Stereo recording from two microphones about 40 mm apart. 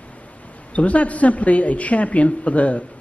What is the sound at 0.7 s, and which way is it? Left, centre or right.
A woman's voice, left.